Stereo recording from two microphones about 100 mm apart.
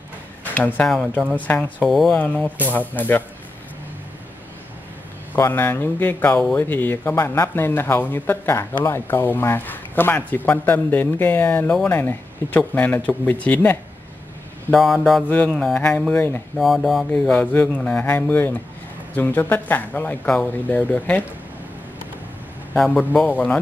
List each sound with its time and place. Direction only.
0.8 s speech: 5° left (ahead or behind)
1.3 s speech: 15° left (ahead or behind)
1.9 s speech: centre (ahead or behind)
2.1 s speech: 15° left (ahead or behind)
2.4 s speech: 15° right (ahead or behind)
2.9 s speech: 20° left (ahead or behind)
5.3 s speech: 20° left (ahead or behind)
14.7 s speech: centre (ahead or behind)
15.2 s speech: 15° left (ahead or behind)
16.5 s speech: centre (ahead or behind)
17.1 s speech: 10° left (ahead or behind)
22.8 s speech: 10° left (ahead or behind)